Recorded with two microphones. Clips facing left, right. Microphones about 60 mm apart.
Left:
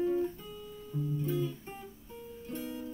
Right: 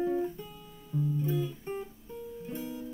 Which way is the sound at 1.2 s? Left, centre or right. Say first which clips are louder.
Right 1 dB; centre.